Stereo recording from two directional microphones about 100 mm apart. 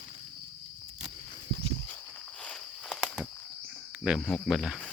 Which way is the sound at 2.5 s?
10° left (ahead or behind).